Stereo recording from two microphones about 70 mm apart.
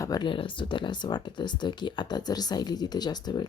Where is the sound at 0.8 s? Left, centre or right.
Left.